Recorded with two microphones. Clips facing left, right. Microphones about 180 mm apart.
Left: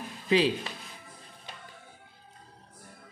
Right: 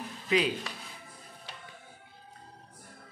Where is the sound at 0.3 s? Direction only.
30° left (ahead or behind).